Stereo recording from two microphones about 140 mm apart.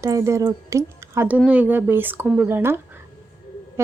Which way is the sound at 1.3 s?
10° right (ahead or behind).